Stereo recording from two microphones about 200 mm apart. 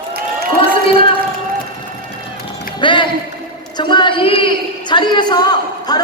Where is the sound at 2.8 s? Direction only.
25° left (ahead or behind).